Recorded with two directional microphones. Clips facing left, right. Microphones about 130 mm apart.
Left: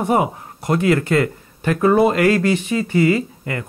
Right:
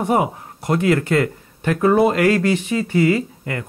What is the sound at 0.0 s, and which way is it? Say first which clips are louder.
Speech: left 1 dB; 25° left (ahead or behind).